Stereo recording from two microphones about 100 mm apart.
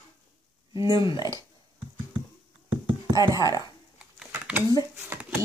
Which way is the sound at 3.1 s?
35° right (ahead or behind).